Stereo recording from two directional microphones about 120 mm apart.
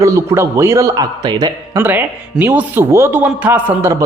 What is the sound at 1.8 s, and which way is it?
A man's voice, 15° right (ahead or behind).